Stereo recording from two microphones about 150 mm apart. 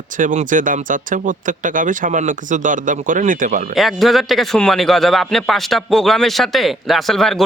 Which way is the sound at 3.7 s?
Centre (ahead or behind).